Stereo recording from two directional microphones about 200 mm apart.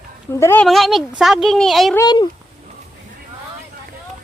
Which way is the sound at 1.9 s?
20° left (ahead or behind).